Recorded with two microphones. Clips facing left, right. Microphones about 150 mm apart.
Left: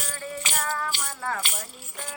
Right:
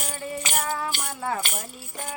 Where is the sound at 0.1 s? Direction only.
15° right (ahead or behind).